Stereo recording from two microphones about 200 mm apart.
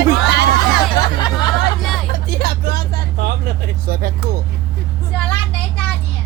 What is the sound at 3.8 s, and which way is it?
Music, 45° right (ahead or behind).